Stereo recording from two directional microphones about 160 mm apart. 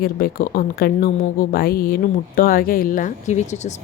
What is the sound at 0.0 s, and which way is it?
Speech, 65° left (ahead or behind).